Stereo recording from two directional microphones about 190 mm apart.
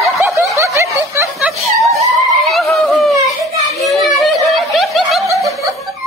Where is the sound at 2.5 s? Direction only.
Centre (ahead or behind).